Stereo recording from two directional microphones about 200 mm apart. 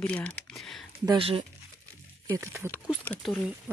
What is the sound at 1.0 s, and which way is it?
Speech, 25° right (ahead or behind).